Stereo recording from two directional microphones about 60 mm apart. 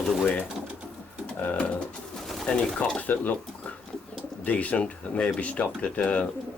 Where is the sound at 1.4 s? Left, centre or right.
Left.